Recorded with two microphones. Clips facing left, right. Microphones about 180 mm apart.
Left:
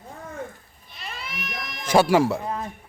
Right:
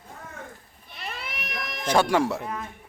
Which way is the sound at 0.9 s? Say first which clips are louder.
Even; 60° right (ahead or behind).